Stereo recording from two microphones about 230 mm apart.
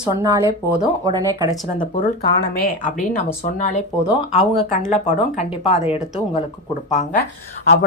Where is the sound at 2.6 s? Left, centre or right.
Left.